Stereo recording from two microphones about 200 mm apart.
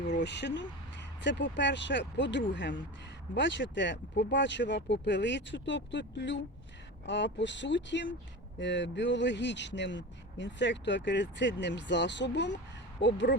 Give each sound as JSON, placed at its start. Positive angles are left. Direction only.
{"t": 0.2, "sound": "speech", "side_deg": 60}